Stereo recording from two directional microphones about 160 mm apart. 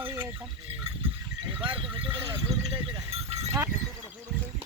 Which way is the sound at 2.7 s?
35° right (ahead or behind).